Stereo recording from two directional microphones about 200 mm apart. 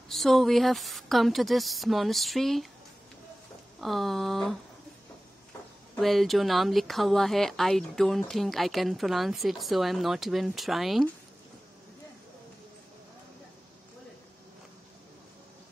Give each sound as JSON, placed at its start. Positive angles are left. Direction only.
{"t": 0.1, "sound": "speech", "side_deg": 0}
{"t": 3.8, "sound": "speech", "side_deg": 0}
{"t": 5.9, "sound": "speech", "side_deg": 0}